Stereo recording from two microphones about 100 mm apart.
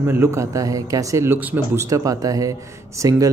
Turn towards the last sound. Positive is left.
turn(degrees=-35)  # may be behind; listen again after turning